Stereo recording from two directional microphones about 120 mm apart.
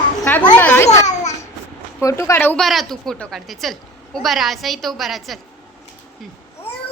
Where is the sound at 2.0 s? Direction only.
20° left (ahead or behind).